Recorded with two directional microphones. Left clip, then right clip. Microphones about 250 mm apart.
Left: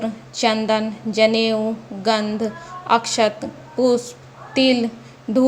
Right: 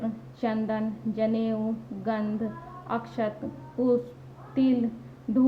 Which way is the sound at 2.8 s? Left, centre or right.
Left.